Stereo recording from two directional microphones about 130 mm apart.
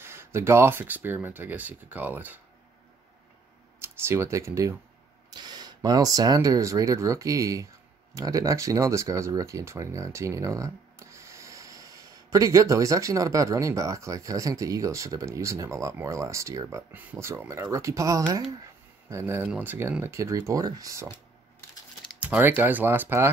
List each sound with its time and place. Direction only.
0.0 s speech: 20° right (ahead or behind)
3.8 s speech: 20° right (ahead or behind)
19.4 s speech: 10° right (ahead or behind)
22.2 s speech: 15° right (ahead or behind)